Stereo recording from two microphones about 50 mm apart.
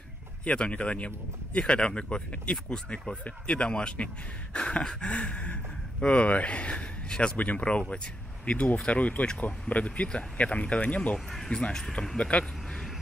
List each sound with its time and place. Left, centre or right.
0.5 s speech: left
11.1 s speech: centre
12.2 s speech: left